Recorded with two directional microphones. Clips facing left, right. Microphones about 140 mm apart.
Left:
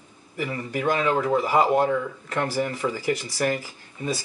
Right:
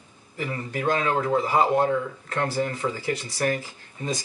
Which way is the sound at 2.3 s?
15° left (ahead or behind).